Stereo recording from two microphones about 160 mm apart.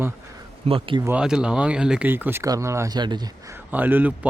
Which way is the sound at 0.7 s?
35° right (ahead or behind).